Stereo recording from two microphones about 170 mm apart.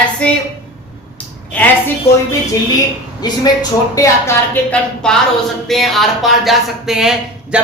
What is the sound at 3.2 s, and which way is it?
A woman's voice, 20° left (ahead or behind).